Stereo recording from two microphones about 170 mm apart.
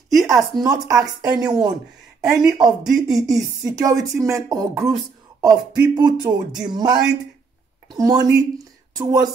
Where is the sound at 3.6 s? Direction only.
20° right (ahead or behind).